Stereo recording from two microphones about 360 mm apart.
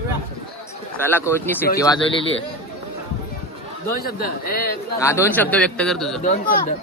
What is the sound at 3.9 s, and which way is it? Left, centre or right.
Speech, left.